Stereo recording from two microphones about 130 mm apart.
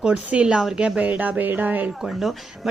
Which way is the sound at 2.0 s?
Centre (ahead or behind).